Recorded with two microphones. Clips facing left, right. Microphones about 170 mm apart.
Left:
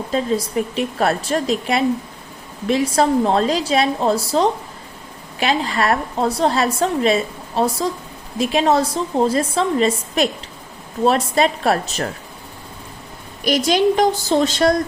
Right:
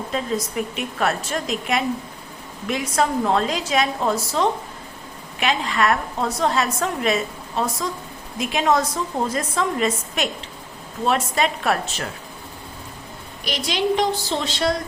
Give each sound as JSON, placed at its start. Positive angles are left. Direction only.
{"t": 0.1, "sound": "a woman's voice", "side_deg": 30}
{"t": 13.4, "sound": "a woman's voice", "side_deg": 45}